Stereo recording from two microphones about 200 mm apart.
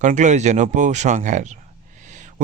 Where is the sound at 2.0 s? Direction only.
40° right (ahead or behind).